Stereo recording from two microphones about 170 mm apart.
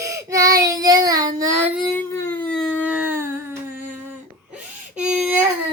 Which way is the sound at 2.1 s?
15° left (ahead or behind).